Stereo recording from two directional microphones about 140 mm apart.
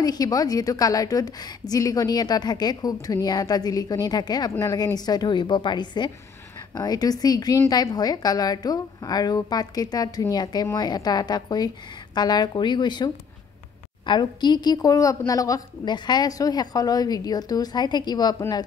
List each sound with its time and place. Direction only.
0.0 s a woman's voice: 25° left (ahead or behind)